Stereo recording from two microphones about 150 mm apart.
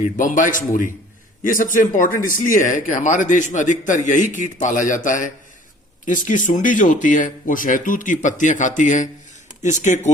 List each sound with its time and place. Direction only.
0.0 s speech: 60° left (ahead or behind)